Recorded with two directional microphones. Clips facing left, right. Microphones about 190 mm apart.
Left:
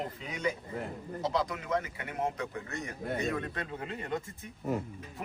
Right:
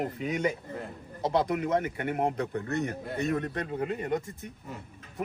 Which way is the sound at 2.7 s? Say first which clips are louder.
Right 4 dB; 60° right (ahead or behind).